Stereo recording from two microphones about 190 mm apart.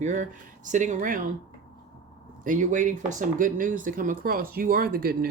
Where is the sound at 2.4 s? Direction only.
40° right (ahead or behind).